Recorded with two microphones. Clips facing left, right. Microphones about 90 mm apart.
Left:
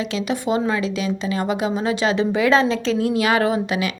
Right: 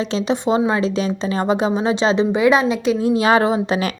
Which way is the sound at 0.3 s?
25° right (ahead or behind).